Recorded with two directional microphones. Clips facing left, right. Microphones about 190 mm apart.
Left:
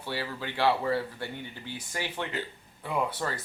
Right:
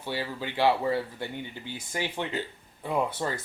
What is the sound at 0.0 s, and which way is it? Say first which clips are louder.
Speech: right 2 dB; 15° right (ahead or behind).